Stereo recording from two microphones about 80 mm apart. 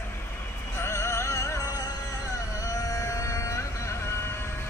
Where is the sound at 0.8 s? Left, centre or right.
Left.